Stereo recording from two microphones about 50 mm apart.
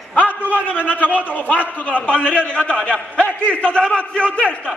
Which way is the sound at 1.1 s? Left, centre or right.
Left.